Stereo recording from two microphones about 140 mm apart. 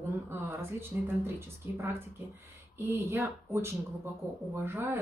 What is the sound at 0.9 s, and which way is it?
A woman's voice, 10° right (ahead or behind).